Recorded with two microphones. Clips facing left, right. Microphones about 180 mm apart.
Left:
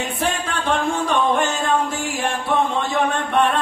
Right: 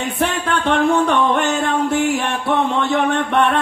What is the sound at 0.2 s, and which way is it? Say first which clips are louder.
Music: right 6 dB; 65° right (ahead or behind).